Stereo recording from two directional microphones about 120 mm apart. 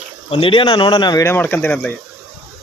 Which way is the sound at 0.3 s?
50° left (ahead or behind).